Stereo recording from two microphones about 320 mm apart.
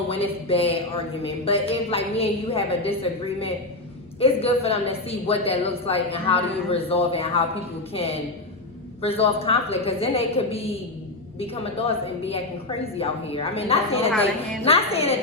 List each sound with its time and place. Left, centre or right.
0.1 s speech: centre
9.0 s speech: centre